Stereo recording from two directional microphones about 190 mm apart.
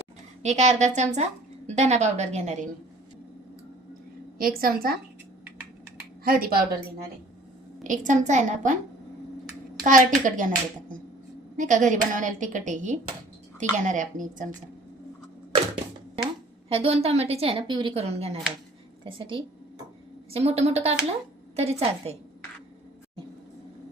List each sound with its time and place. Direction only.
0.4 s a woman's voice: 35° right (ahead or behind)
4.4 s a woman's voice: 50° right (ahead or behind)
6.2 s a woman's voice: 50° right (ahead or behind)
7.9 s a woman's voice: 40° right (ahead or behind)
9.8 s a woman's voice: 40° right (ahead or behind)
16.6 s a woman's voice: 30° right (ahead or behind)